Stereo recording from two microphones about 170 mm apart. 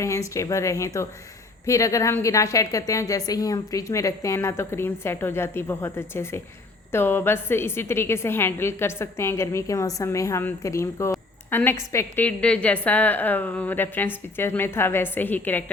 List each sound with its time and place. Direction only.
0.3 s a woman's voice: 20° left (ahead or behind)